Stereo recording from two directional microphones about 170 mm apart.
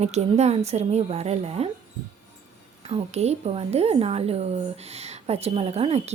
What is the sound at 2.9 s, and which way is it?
A woman's voice, 40° right (ahead or behind).